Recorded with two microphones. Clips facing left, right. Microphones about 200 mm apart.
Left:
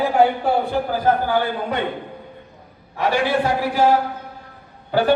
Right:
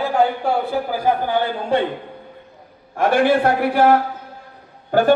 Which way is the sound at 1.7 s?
30° right (ahead or behind).